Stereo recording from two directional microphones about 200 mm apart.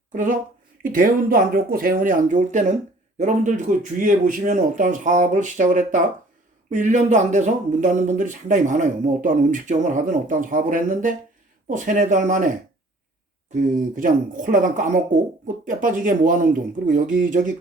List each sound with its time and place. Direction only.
0.1 s speech: 40° right (ahead or behind)